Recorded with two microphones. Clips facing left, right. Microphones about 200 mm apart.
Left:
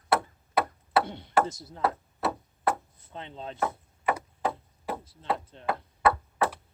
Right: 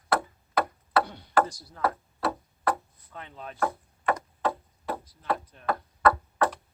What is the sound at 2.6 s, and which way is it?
Chopping, 25° left (ahead or behind).